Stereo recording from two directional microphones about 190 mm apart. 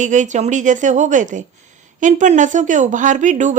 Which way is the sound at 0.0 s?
40° right (ahead or behind).